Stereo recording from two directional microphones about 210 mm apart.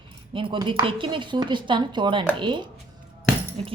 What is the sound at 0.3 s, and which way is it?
Speech, 25° right (ahead or behind).